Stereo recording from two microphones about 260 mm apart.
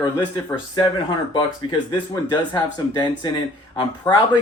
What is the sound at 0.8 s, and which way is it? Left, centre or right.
Speech, centre.